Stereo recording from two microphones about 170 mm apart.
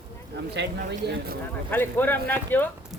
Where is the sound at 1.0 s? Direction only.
80° right.